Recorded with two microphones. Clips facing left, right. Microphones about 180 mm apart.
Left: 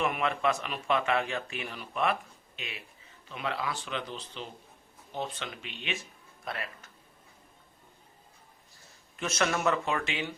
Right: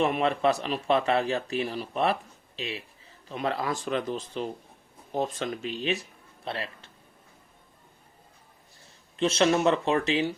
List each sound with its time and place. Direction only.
0.0 s speech: 35° right (ahead or behind)
9.1 s speech: 30° right (ahead or behind)